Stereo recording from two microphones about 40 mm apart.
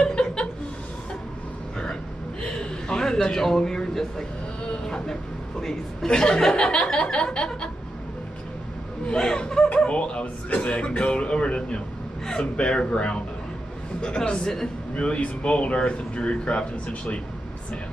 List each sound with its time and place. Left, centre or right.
0.0 s chuckle: left
2.4 s a sound: left
5.6 s speech: centre
9.0 s speech: centre